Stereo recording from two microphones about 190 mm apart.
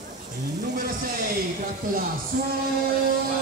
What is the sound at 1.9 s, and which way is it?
Speech, 45° right (ahead or behind).